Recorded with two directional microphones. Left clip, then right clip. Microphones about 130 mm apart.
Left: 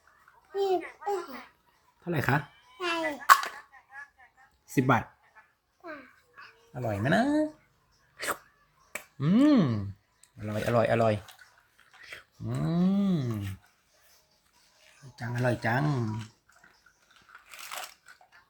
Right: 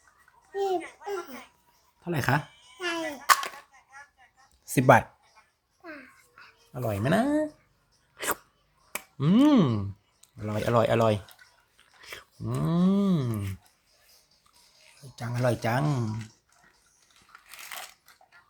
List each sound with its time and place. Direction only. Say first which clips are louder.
0.5 s a sound: even; centre (ahead or behind)
2.0 s speech: right 1 dB; 30° right (ahead or behind)
2.7 s a sound: left 1 dB; 5° right (ahead or behind)
4.6 s speech: right 7 dB; 70° right (ahead or behind)
5.8 s a sound: left 1 dB; 10° right (ahead or behind)
6.7 s speech: right 1 dB; 35° right (ahead or behind)
8.1 s dog: right 2 dB; 35° right (ahead or behind)
8.9 s speech: right 3 dB; 35° right (ahead or behind)
15.1 s speech: right 2 dB; 35° right (ahead or behind)